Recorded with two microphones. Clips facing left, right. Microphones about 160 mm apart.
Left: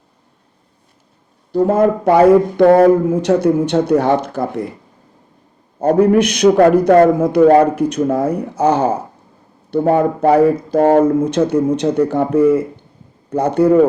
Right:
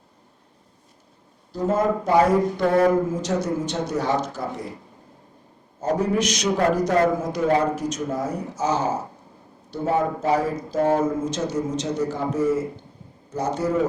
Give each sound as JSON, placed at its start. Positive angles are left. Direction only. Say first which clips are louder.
{"t": 1.5, "sound": "speech", "louder": "left 8 dB", "side_deg": 60}
{"t": 5.8, "sound": "speech", "louder": "left 10 dB", "side_deg": 60}